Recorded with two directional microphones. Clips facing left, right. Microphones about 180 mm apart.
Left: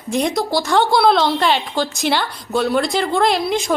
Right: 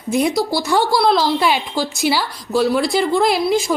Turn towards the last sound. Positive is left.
turn(degrees=0)  # may be behind; listen again after turning